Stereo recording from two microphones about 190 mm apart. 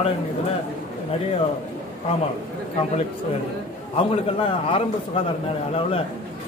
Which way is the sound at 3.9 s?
30° left (ahead or behind).